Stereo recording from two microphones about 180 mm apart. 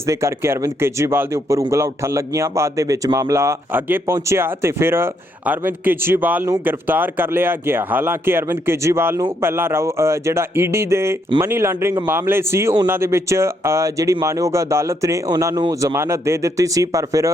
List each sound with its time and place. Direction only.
0.1 s speech: 15° right (ahead or behind)